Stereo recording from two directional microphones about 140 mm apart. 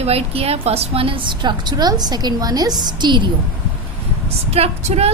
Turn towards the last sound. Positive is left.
turn(degrees=-50)  # may be behind; listen again after turning